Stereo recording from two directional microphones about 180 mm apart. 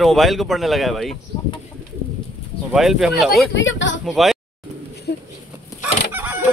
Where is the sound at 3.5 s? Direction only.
90° left.